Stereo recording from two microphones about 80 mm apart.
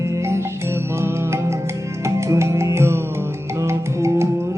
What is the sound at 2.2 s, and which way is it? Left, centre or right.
Music, right.